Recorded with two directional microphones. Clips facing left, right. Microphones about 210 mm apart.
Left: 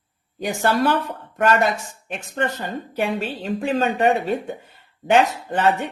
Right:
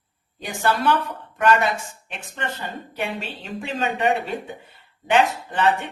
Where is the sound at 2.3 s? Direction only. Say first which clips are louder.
Left 6 dB; 40° left (ahead or behind).